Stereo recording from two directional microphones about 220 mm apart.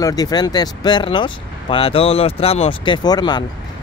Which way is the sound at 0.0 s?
15° left (ahead or behind).